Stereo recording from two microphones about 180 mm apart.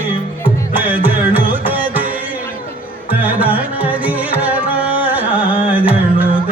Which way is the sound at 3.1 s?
10° right (ahead or behind).